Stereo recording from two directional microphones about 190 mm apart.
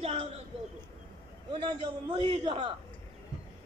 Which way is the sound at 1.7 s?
30° right (ahead or behind).